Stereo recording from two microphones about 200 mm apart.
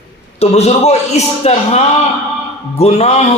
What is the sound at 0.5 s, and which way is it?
A man's voice, 30° left (ahead or behind).